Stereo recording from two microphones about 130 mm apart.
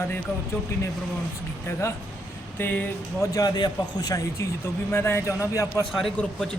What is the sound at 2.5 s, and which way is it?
Speech, 15° left (ahead or behind).